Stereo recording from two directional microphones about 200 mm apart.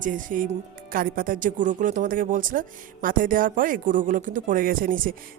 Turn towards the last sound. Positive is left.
turn(degrees=-45)  # may be behind; listen again after turning